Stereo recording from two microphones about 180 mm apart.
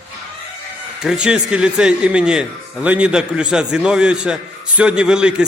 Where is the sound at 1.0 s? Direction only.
5° right (ahead or behind).